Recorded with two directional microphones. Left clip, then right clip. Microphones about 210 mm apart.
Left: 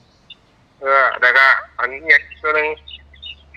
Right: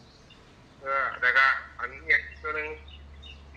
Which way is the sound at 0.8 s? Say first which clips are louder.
Left 13 dB; 45° left (ahead or behind).